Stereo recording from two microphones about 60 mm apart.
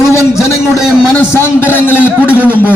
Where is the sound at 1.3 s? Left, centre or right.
Left.